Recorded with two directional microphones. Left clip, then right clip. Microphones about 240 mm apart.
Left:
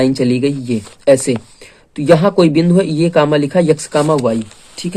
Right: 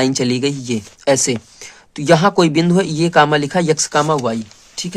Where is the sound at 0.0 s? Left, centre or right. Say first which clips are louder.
Left 3 dB; right.